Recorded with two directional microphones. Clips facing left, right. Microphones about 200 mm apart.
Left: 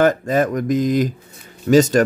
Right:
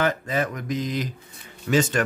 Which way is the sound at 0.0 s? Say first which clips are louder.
Left 8 dB; 45° left (ahead or behind).